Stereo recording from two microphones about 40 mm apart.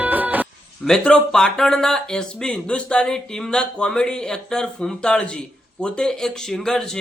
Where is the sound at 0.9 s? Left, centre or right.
Centre.